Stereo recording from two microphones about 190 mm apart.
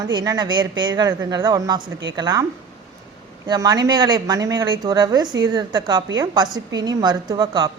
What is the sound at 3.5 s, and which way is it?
Speech, 20° right (ahead or behind).